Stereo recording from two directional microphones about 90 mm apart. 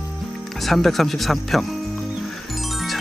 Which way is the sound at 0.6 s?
Centre (ahead or behind).